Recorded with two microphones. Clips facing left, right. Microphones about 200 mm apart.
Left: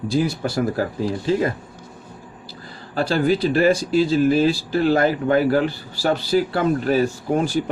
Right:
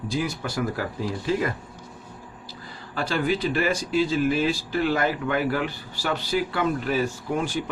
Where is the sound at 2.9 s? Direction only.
35° left (ahead or behind).